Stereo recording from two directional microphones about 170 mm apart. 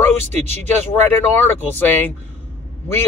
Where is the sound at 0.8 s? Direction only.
10° left (ahead or behind).